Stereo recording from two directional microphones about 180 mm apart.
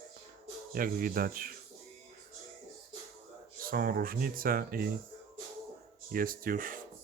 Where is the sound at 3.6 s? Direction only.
55° right (ahead or behind).